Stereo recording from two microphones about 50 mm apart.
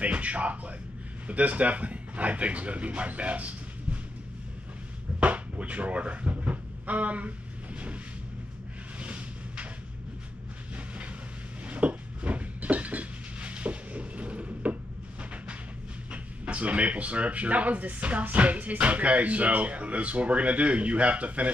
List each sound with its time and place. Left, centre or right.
0.0 s a man's voice: right
5.2 s speech: right
9.0 s a sound: right
11.6 s train: right
16.1 s speech: right